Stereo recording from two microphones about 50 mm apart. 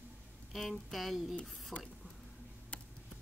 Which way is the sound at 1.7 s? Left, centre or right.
Centre.